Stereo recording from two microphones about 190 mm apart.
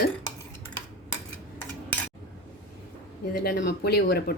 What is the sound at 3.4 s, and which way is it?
Speech, 60° left (ahead or behind).